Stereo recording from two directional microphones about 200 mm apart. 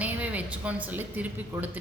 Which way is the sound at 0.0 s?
5° right (ahead or behind).